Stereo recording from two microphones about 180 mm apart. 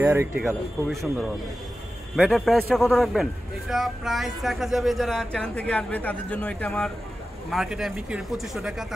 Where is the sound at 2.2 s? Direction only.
Centre (ahead or behind).